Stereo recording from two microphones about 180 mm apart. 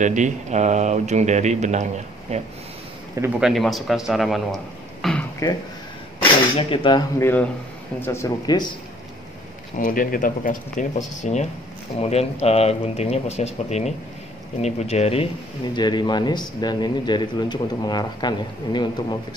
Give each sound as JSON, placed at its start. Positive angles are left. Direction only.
{"t": 0.0, "sound": "speech", "side_deg": -45}
{"t": 3.2, "sound": "a man's voice", "side_deg": -5}
{"t": 5.0, "sound": "a sound", "side_deg": 0}
{"t": 5.4, "sound": "speech", "side_deg": 20}
{"t": 7.2, "sound": "speech", "side_deg": 10}
{"t": 9.8, "sound": "speech", "side_deg": 50}
{"t": 15.7, "sound": "speech", "side_deg": 25}